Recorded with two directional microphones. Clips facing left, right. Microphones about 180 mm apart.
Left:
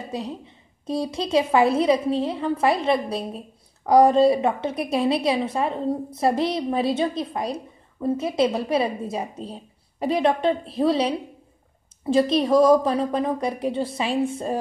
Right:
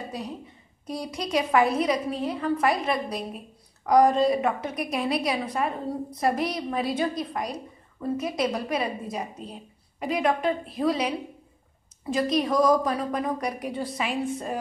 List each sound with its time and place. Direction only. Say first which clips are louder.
0.1 s a woman's voice: left 4 dB; 25° left (ahead or behind)